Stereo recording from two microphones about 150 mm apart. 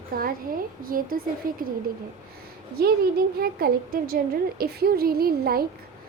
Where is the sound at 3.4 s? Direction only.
80° right.